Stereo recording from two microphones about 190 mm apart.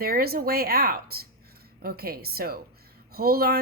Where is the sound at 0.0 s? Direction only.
55° right (ahead or behind).